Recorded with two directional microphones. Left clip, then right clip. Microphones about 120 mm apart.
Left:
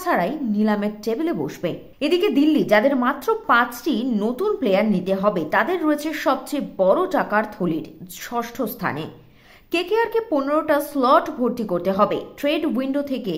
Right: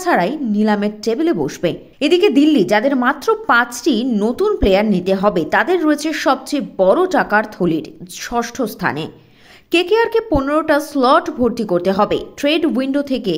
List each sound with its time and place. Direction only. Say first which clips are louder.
0.0 s a woman's voice: right 5 dB; 30° right (ahead or behind)